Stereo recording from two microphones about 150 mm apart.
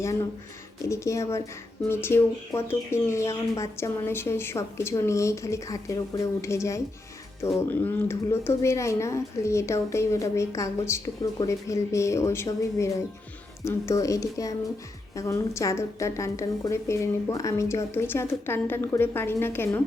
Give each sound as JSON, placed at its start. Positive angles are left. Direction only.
{"t": 0.9, "sound": "a woman's voice", "side_deg": 20}